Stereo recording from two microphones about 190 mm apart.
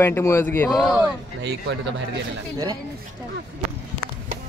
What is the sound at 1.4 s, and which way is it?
Speech, 70° right (ahead or behind).